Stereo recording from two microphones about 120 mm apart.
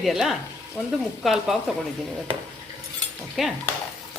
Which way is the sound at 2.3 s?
50° right (ahead or behind).